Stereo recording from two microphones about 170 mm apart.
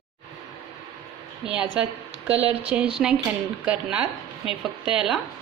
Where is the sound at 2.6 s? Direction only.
5° right (ahead or behind).